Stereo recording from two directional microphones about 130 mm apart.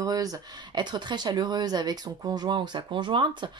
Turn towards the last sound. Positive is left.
turn(degrees=-35)  # may be behind; listen again after turning